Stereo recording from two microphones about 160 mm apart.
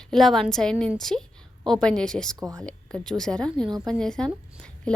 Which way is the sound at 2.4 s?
20° right (ahead or behind).